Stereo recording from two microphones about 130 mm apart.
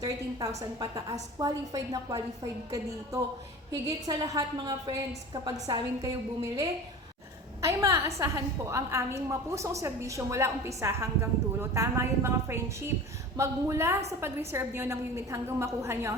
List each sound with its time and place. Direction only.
0.0 s a woman's voice: 30° right (ahead or behind)
7.6 s a woman's voice: 25° right (ahead or behind)